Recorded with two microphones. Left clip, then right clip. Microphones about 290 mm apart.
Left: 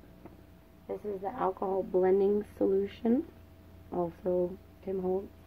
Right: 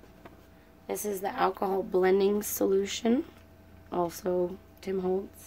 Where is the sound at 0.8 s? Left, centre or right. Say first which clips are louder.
Right 4 dB; right.